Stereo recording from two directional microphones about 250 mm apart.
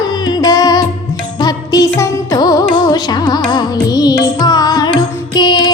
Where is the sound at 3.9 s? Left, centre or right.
Centre.